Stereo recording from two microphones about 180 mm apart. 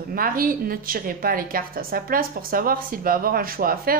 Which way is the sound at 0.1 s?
50° right (ahead or behind).